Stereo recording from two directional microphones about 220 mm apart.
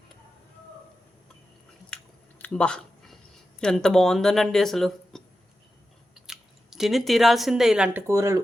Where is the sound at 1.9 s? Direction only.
5° left (ahead or behind).